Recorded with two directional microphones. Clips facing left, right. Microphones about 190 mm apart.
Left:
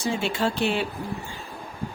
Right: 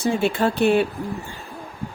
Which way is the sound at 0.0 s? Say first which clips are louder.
Right 5 dB; 55° right (ahead or behind).